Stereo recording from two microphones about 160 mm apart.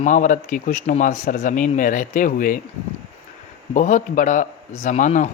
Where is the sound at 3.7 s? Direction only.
50° left (ahead or behind).